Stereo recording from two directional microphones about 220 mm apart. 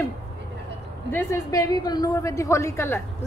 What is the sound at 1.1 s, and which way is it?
A woman's voice, 10° left (ahead or behind).